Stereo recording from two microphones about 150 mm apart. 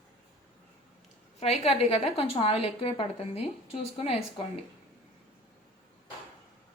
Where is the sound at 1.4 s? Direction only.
40° left (ahead or behind).